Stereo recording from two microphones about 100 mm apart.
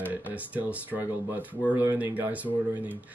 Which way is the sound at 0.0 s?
15° right (ahead or behind).